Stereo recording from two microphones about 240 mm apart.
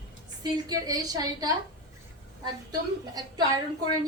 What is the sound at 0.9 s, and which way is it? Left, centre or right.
A woman's voice, centre.